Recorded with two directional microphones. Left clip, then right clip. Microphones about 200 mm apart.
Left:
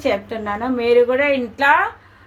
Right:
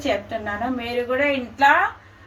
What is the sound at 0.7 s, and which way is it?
Speech, 50° left (ahead or behind).